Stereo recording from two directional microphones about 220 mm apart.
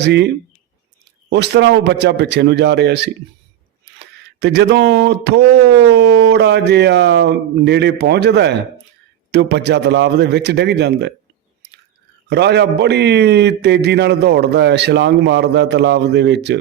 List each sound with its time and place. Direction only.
0.0 s speech: 50° right (ahead or behind)
1.3 s speech: 50° right (ahead or behind)
12.3 s speech: 50° right (ahead or behind)